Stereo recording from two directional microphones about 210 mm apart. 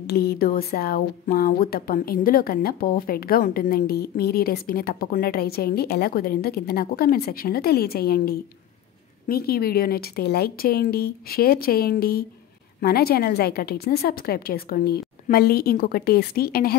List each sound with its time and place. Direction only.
0.0 s speech: 50° left (ahead or behind)